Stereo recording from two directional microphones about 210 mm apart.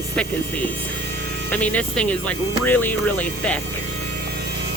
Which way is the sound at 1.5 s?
5° left (ahead or behind).